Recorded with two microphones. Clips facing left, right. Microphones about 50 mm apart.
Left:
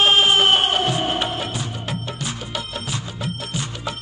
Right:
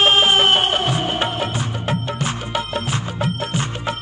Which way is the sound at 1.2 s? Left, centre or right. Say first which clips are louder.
Right 3 dB; right.